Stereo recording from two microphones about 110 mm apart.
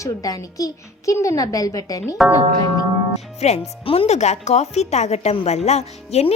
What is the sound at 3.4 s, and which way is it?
Speech, 70° left (ahead or behind).